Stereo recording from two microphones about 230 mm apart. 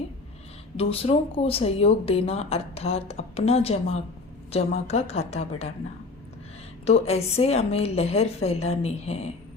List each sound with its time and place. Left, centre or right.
0.8 s speech: left
6.8 s speech: left